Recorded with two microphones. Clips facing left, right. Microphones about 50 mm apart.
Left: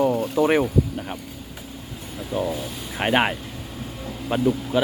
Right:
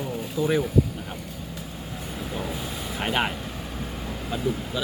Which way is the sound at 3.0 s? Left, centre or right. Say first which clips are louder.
Left 6 dB; left.